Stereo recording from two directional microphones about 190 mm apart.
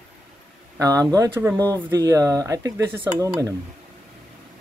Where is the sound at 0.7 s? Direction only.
20° right (ahead or behind).